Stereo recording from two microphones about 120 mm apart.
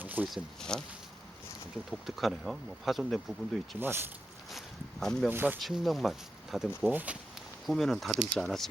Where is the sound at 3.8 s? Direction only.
20° right (ahead or behind).